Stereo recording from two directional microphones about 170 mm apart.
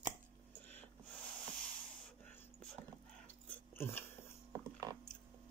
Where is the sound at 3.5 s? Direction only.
15° left (ahead or behind).